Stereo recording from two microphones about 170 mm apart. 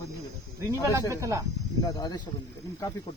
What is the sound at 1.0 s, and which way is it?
Speech, 20° right (ahead or behind).